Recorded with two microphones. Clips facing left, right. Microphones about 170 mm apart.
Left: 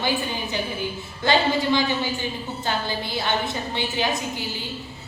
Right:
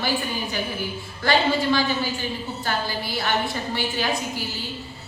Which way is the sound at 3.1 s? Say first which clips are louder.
Right 1 dB; 20° left (ahead or behind).